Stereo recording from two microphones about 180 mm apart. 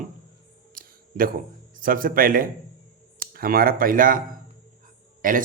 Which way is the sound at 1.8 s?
50° right (ahead or behind).